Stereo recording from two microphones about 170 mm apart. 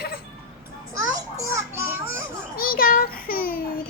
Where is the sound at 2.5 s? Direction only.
60° left (ahead or behind).